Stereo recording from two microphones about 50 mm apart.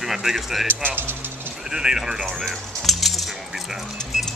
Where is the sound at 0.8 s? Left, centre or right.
Right.